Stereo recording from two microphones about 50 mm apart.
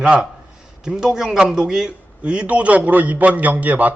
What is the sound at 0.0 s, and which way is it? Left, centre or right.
A man's voice, centre.